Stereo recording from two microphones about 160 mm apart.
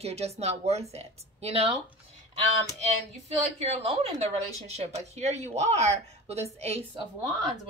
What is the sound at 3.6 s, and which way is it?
A woman's voice, 40° right (ahead or behind).